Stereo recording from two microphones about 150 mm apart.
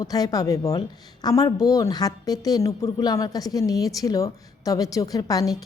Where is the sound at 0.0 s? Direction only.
25° left (ahead or behind).